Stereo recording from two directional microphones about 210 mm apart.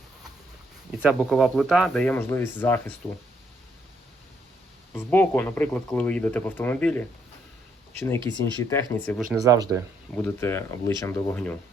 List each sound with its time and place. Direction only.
0.9 s speech: 5° right (ahead or behind)
4.9 s speech: 10° left (ahead or behind)
9.4 s speech: 15° right (ahead or behind)
10.1 s speech: 10° left (ahead or behind)